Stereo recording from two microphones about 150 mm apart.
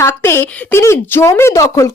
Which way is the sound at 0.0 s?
15° left (ahead or behind).